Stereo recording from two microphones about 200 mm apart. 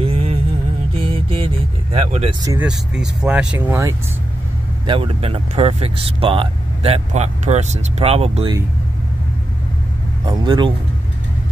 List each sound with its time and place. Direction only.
0.0 s music: 30° right (ahead or behind)
2.6 s speech: 5° right (ahead or behind)
4.8 s speech: 25° right (ahead or behind)
10.2 s speech: 20° right (ahead or behind)